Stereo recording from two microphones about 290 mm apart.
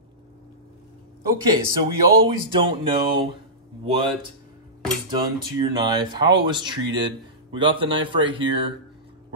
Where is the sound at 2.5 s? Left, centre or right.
Centre.